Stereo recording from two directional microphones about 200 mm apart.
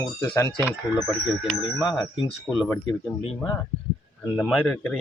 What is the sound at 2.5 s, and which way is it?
Speech, centre (ahead or behind).